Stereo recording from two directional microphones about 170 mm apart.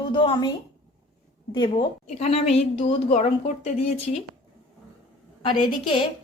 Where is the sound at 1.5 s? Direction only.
25° left (ahead or behind).